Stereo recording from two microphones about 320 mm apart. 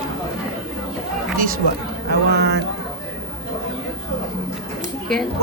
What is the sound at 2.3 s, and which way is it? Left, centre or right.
Speech, right.